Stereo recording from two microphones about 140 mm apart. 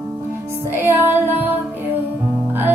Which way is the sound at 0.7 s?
15° right (ahead or behind).